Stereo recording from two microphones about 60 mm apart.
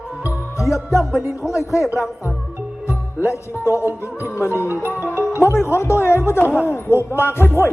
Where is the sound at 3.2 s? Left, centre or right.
Left.